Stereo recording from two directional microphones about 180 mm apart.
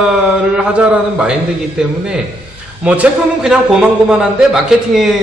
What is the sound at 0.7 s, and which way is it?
A man's voice, 5° right (ahead or behind).